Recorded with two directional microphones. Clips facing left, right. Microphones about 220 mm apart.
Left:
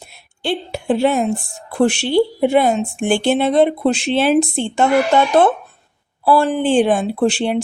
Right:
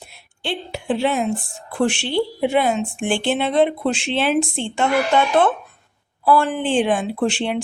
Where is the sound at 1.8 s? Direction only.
40° left (ahead or behind).